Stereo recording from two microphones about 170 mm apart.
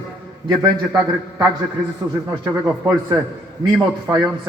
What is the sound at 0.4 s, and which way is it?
Speech, 20° right (ahead or behind).